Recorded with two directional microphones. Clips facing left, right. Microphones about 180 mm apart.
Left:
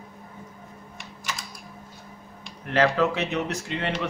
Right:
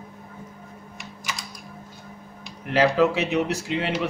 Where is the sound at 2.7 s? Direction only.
10° right (ahead or behind).